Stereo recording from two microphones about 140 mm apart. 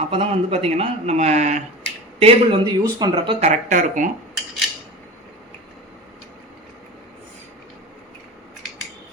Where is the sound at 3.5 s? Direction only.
70° right (ahead or behind).